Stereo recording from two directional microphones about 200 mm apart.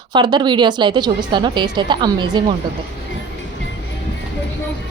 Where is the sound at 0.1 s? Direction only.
20° right (ahead or behind).